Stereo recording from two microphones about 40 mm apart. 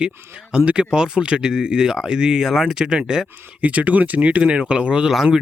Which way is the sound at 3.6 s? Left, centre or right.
Right.